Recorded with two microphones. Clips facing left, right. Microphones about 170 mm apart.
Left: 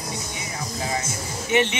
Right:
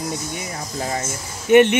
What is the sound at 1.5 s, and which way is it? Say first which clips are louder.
Speech: right 9 dB; 55° right (ahead or behind).